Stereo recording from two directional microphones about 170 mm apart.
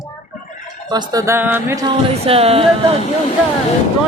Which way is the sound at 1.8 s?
35° right (ahead or behind).